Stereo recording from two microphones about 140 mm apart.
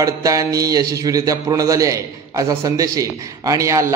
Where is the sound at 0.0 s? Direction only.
25° right (ahead or behind).